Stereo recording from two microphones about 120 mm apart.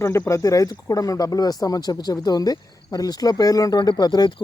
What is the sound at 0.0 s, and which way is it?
Speech, 25° left (ahead or behind).